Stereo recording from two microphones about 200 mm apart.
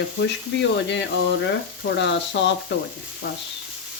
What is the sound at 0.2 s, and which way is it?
Speech, 65° left (ahead or behind).